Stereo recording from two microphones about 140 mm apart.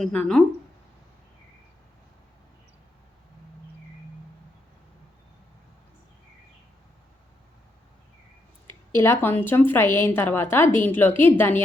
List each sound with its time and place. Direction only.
0.0 s speech: 10° left (ahead or behind)
8.6 s a woman's voice: 20° left (ahead or behind)